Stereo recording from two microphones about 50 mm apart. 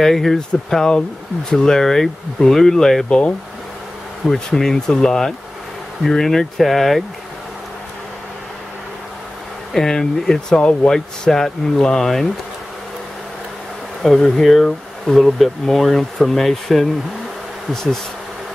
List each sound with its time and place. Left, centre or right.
0.0 s speech: centre
3.1 s speech: left
4.3 s speech: centre
9.8 s speech: centre
10.9 s speech: centre
14.0 s speech: centre